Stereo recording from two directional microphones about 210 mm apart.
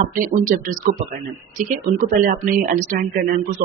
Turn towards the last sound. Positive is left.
turn(degrees=-45)  # may be behind; listen again after turning